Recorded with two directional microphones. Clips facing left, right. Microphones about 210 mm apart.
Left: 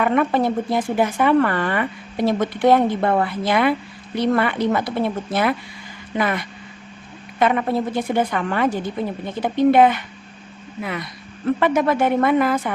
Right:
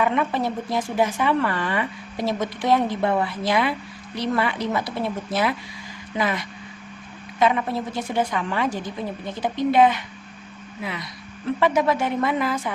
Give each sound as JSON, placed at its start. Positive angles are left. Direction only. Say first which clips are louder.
{"t": 0.0, "sound": "speech", "louder": "left 4 dB", "side_deg": 55}